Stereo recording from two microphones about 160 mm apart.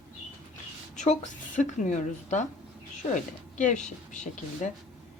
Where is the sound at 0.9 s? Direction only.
50° left (ahead or behind).